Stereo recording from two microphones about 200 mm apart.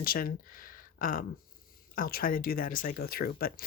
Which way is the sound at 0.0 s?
45° left (ahead or behind).